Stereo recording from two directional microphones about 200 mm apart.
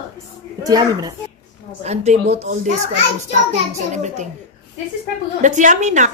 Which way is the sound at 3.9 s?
35° right (ahead or behind).